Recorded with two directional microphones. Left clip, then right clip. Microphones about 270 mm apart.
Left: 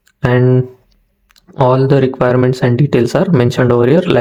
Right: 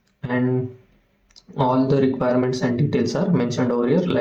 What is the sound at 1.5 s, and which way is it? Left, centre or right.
Speech, left.